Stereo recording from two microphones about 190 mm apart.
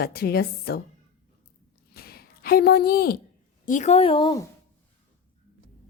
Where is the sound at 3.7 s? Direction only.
40° left (ahead or behind).